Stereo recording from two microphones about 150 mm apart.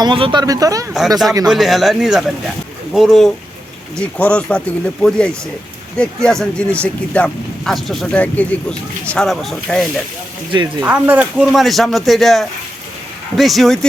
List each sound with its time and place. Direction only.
0.0 s speech: 35° right (ahead or behind)
1.5 s speech: centre (ahead or behind)
10.5 s speech: 30° right (ahead or behind)
10.8 s speech: 10° right (ahead or behind)